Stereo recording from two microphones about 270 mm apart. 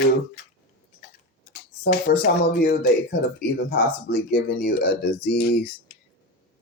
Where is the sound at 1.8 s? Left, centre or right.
Left.